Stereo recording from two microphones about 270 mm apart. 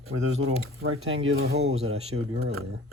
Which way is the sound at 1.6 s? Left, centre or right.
Right.